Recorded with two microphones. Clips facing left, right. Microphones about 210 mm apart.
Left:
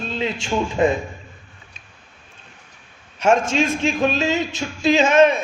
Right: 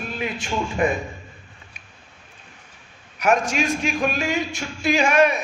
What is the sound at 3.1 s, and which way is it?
A man's voice, 25° left (ahead or behind).